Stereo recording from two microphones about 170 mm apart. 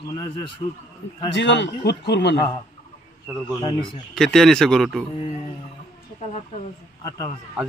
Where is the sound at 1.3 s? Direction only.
90° left.